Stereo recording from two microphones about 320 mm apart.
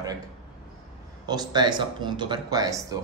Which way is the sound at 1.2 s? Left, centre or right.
Centre.